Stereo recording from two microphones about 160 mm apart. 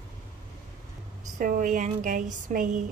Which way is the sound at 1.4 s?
55° right (ahead or behind).